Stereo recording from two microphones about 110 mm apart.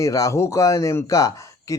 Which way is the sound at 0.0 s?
30° left (ahead or behind).